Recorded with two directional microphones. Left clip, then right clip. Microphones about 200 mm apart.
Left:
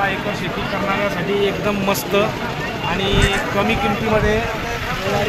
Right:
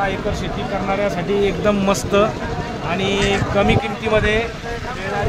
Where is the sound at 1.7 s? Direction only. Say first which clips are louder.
Right 2 dB; 40° right (ahead or behind).